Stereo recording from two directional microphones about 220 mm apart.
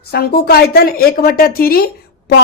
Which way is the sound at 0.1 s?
45° left (ahead or behind).